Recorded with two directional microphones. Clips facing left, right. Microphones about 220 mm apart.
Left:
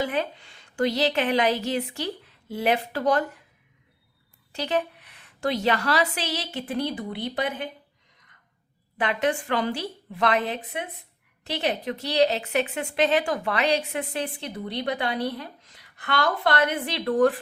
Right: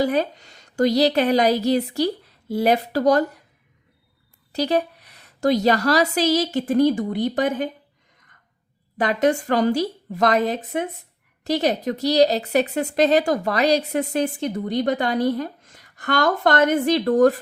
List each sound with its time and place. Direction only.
0.0 s a woman's voice: 40° right (ahead or behind)
4.5 s a woman's voice: 40° right (ahead or behind)
9.0 s a woman's voice: 40° right (ahead or behind)